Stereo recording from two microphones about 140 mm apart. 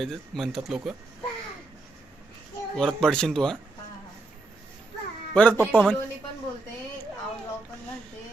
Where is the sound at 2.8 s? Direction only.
5° left (ahead or behind).